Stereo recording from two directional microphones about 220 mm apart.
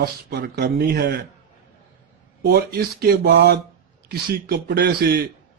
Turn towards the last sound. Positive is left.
turn(degrees=-45)  # may be behind; listen again after turning